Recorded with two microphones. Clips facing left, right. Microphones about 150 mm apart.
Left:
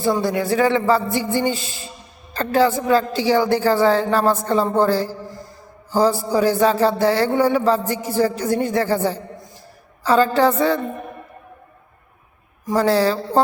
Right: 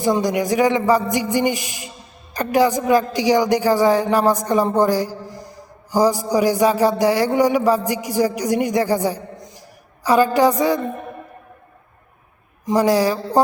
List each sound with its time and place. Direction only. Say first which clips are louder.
0.0 s speech: right 1 dB; 15° right (ahead or behind)
12.6 s speech: right 1 dB; 15° right (ahead or behind)